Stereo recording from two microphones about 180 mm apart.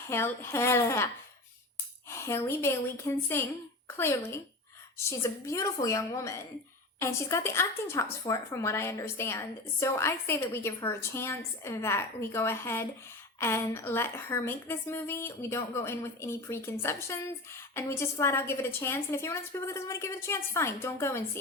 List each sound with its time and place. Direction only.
0.1 s a woman's voice: 15° left (ahead or behind)
2.0 s a woman's voice: 15° left (ahead or behind)